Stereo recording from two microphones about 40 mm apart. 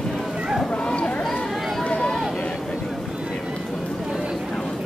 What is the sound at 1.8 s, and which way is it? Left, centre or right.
Vehicle, left.